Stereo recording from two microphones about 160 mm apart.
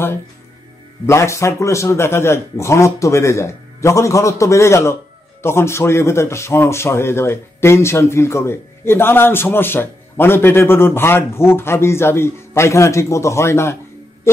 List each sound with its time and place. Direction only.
1.0 s speech: 15° left (ahead or behind)